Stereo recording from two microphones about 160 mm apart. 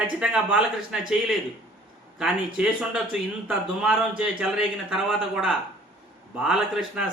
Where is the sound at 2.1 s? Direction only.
5° right (ahead or behind).